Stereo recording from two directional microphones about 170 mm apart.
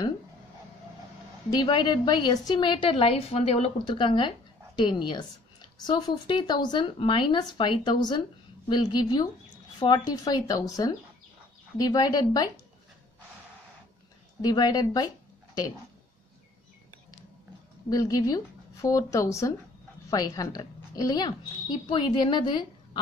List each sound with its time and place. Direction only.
1.5 s a woman's voice: 25° left (ahead or behind)
14.4 s a woman's voice: 20° left (ahead or behind)
17.8 s a woman's voice: 20° left (ahead or behind)